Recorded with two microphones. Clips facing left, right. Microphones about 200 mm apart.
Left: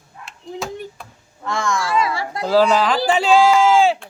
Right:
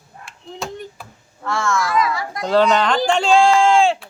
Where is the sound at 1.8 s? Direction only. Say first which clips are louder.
Right 1 dB; 30° left (ahead or behind).